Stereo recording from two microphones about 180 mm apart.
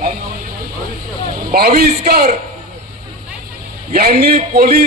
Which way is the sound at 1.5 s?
55° right (ahead or behind).